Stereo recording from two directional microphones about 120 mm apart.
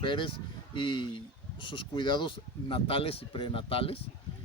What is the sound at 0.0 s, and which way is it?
Speech, 45° left (ahead or behind).